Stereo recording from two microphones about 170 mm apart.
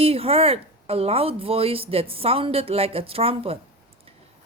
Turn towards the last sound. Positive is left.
turn(degrees=-35)  # may be behind; listen again after turning